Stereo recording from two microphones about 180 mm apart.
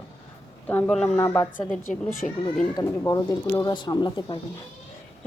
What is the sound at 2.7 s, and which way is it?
Speech, 20° left (ahead or behind).